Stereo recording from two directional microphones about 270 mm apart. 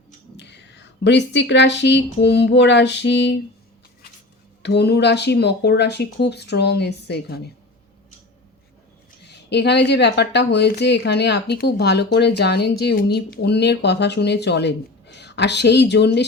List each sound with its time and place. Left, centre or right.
0.3 s speech: left
4.6 s speech: left
9.5 s speech: left